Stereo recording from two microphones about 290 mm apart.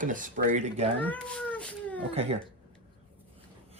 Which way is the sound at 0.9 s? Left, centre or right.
Centre.